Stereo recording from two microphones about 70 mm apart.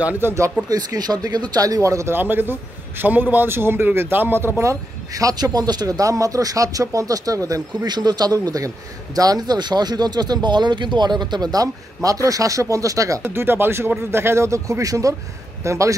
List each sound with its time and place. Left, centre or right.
0.2 s a man's voice: right
0.7 s speech: right
2.1 s a man's voice: right
4.6 s speech: right
7.8 s a man's voice: right
13.2 s a man's voice: right